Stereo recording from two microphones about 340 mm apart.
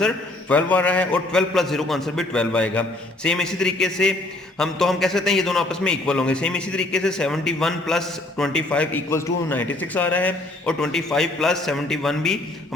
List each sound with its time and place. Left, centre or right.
0.0 s a man's voice: centre